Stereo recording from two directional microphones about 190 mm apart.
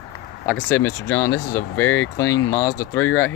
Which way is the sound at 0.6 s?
10° left (ahead or behind).